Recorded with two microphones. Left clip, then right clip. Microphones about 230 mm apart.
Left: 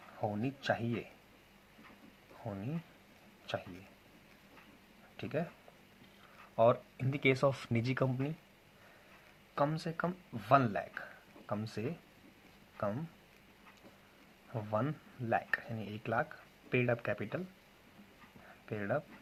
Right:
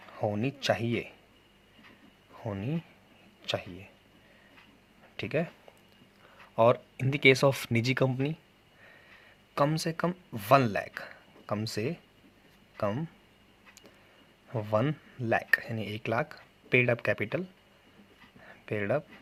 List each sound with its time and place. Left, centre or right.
0.2 s speech: right
2.4 s speech: right
5.1 s speech: right
6.6 s speech: right
9.6 s speech: right
14.5 s speech: right
18.7 s speech: right